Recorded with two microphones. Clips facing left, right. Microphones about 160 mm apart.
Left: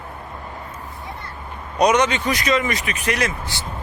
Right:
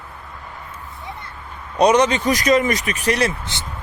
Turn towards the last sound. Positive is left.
turn(degrees=-20)  # may be behind; listen again after turning